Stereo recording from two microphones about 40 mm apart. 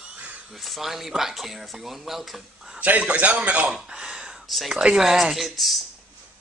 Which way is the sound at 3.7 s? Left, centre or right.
Centre.